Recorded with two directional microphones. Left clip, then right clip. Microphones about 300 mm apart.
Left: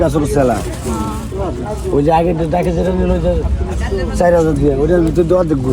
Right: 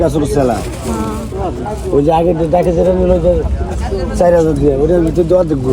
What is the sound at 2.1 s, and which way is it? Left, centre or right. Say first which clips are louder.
Speech: right 1 dB; left.